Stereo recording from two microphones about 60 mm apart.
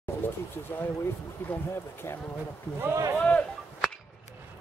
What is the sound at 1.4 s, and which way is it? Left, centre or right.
Speech, left.